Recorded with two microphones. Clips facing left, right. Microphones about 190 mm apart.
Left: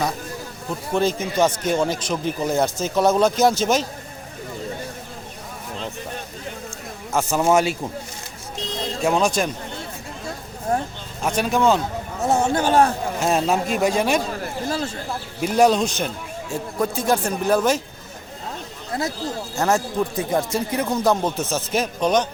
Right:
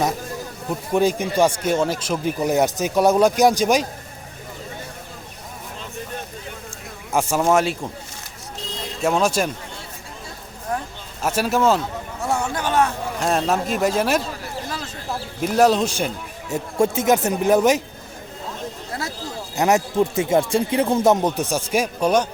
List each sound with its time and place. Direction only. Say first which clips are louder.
0.9 s speech: right 2 dB; 15° right (ahead or behind)
7.1 s speech: right 1 dB; 10° right (ahead or behind)
7.4 s speech: left 1 dB; centre (ahead or behind)
9.0 s speech: right 1 dB; centre (ahead or behind)
10.7 s a sound: left 4 dB; 30° left (ahead or behind)
11.2 s speech: even; 5° right (ahead or behind)
12.2 s speech: left 4 dB; 20° left (ahead or behind)
13.1 s speech: even; centre (ahead or behind)
15.4 s speech: even; centre (ahead or behind)
16.5 s speech: right 4 dB; 25° right (ahead or behind)
18.9 s speech: left 6 dB; 20° left (ahead or behind)
19.5 s speech: right 3 dB; 20° right (ahead or behind)